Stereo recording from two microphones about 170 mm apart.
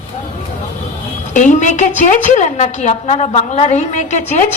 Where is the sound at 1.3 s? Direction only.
45° left (ahead or behind).